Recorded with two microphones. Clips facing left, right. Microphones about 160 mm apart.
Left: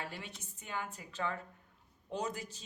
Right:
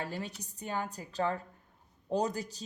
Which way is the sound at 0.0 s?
40° right (ahead or behind).